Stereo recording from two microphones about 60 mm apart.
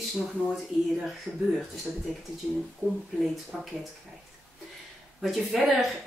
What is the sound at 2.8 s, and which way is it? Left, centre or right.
Speech, right.